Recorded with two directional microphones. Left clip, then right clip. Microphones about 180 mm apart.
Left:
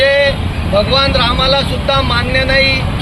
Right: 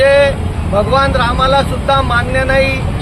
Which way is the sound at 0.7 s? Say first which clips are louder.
Even; 15° right (ahead or behind).